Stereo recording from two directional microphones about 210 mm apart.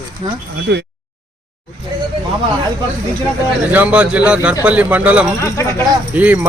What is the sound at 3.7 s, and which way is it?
A man's voice, 5° right (ahead or behind).